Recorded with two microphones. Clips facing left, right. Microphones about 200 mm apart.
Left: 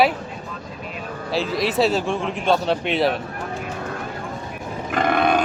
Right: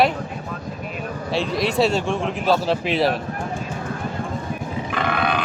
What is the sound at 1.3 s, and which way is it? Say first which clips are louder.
A man's voice: even; centre (ahead or behind).